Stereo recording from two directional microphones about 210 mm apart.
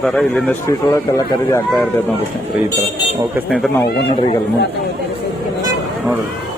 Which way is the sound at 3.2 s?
5° right (ahead or behind).